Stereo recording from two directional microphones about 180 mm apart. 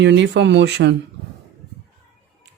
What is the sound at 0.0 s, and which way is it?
Speech, 80° right.